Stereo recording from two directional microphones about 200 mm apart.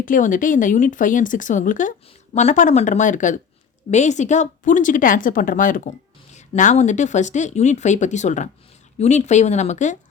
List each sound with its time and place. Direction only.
0.0 s speech: 40° left (ahead or behind)